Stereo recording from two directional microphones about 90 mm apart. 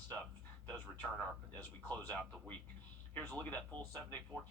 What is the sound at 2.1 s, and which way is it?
Speech, 15° left (ahead or behind).